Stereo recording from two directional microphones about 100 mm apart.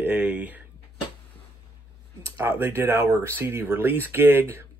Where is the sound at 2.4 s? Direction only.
25° right (ahead or behind).